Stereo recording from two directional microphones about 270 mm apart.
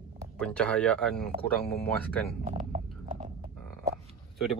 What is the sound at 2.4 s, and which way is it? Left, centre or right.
Speech, right.